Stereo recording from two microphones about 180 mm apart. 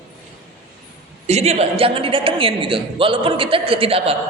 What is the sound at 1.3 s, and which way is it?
A man's voice, 35° right (ahead or behind).